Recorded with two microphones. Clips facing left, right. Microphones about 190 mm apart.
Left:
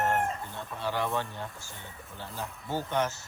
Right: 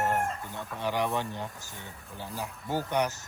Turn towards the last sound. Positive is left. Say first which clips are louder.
# right 1 dB
turn(degrees=-15)  # may be behind; listen again after turning